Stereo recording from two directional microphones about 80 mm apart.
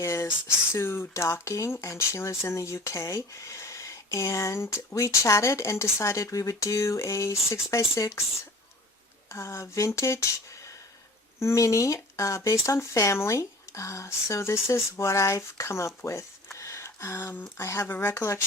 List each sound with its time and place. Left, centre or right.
0.0 s speech: left
9.3 s speech: left
16.0 s a sound: left
17.6 s speech: left